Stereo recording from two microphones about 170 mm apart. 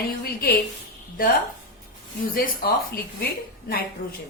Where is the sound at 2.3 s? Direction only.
60° left (ahead or behind).